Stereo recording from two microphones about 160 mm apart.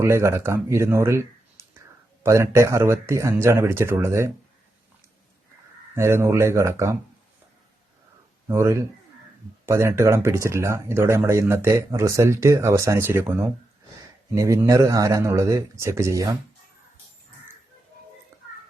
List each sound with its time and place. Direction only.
0.0 s speech: 15° right (ahead or behind)
5.9 s speech: 15° right (ahead or behind)
8.4 s speech: 15° right (ahead or behind)